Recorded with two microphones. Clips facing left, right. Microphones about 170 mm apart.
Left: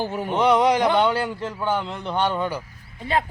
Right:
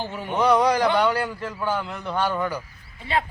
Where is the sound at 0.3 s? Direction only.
20° left (ahead or behind).